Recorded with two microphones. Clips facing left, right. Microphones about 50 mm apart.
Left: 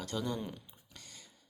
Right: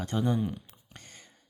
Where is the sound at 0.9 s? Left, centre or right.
Right.